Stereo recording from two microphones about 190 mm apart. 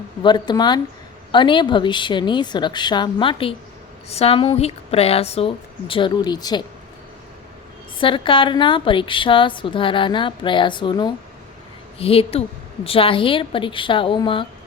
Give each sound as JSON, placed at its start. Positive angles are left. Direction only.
{"t": 0.2, "sound": "a woman's voice", "side_deg": 25}
{"t": 7.9, "sound": "a woman's voice", "side_deg": 25}